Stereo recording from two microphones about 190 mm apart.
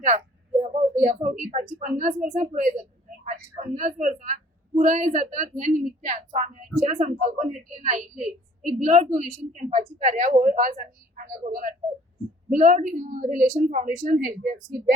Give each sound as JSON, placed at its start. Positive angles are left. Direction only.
{"t": 0.6, "sound": "a woman's voice", "side_deg": -40}